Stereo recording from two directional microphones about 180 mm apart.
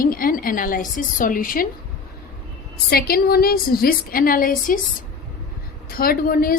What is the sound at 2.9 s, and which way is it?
A woman's voice, 55° left (ahead or behind).